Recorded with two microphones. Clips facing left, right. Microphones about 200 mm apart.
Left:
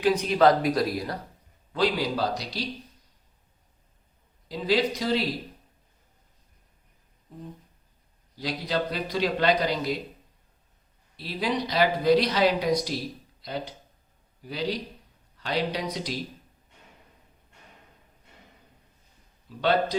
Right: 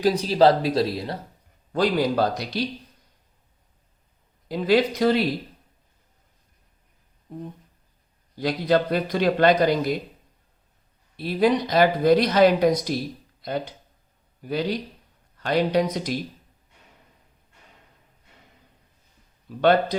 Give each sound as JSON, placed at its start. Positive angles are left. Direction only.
{"t": 0.0, "sound": "speech", "side_deg": -35}
{"t": 1.7, "sound": "speech", "side_deg": -45}
{"t": 4.4, "sound": "speech", "side_deg": -55}
{"t": 8.4, "sound": "speech", "side_deg": -55}
{"t": 11.2, "sound": "speech", "side_deg": -50}
{"t": 19.5, "sound": "speech", "side_deg": -55}